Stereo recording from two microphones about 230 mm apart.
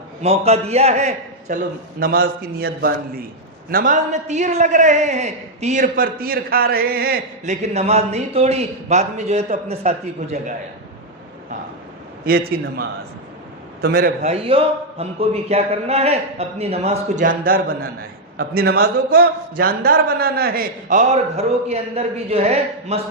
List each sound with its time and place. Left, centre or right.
0.2 s a man's voice: right
7.6 s a man's voice: right
12.2 s a man's voice: right